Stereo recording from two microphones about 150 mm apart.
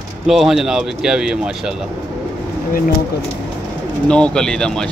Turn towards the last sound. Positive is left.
turn(degrees=5)  # may be behind; listen again after turning